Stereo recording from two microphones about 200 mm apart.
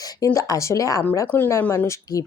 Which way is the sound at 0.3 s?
15° left (ahead or behind).